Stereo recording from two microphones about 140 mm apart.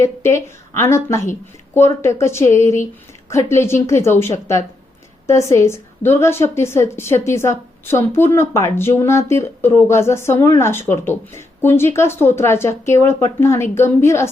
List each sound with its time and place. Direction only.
0.0 s speech: 20° left (ahead or behind)